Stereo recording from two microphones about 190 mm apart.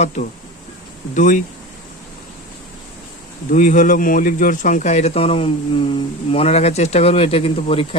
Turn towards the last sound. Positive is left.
turn(degrees=30)  # may be behind; listen again after turning